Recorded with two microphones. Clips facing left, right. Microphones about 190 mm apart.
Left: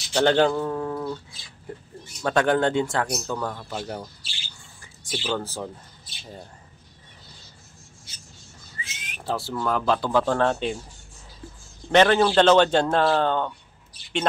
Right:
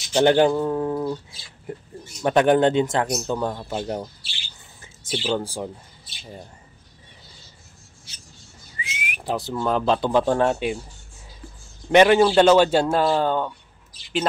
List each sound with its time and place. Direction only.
0.1 s a man's voice: 15° right (ahead or behind)
2.2 s a man's voice: 20° right (ahead or behind)
5.2 s a man's voice: 15° right (ahead or behind)
8.7 s speech: 15° right (ahead or behind)
11.9 s a man's voice: 10° right (ahead or behind)